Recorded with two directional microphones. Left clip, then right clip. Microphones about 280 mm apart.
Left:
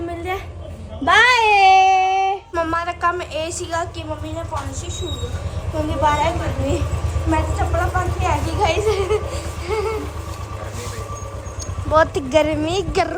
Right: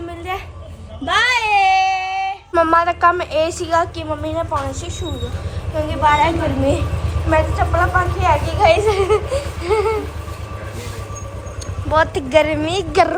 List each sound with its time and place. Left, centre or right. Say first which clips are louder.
0.1 s a sound: even; centre
1.0 s baby cry: left 3 dB; centre
1.5 s a sound: left 2 dB; right
2.3 s a woman's voice: right 7 dB; centre
5.7 s a woman's voice: right 3 dB; centre
11.9 s a woman's voice: even; centre